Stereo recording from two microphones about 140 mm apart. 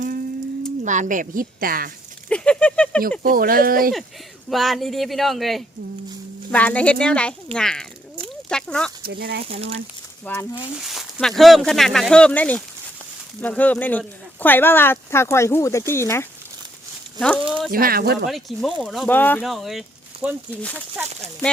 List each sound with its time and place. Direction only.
0.9 s a woman's voice: 65° right (ahead or behind); by 1.9 s 90° right
2.3 s a sound: 5° left (ahead or behind)
3.2 s speech: 90° right
4.4 s speech: centre (ahead or behind)
9.0 s speech: 90° right
9.4 s speech: 45° right (ahead or behind)
10.2 s speech: 15° left (ahead or behind)
10.8 s speech: centre (ahead or behind); by 16.2 s 20° left (ahead or behind)
17.2 s speech: 10° left (ahead or behind)
17.7 s speech: 90° right
18.3 s speech: centre (ahead or behind)
19.4 s speech: centre (ahead or behind)
20.6 s speech: 10° left (ahead or behind)